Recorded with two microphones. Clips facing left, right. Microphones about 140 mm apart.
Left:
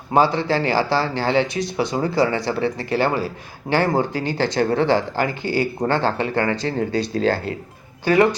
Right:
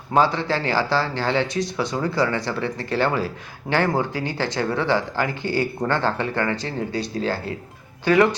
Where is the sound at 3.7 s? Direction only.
40° left (ahead or behind).